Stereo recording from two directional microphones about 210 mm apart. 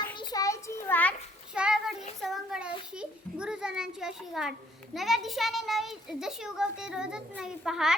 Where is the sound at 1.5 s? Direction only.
5° right (ahead or behind).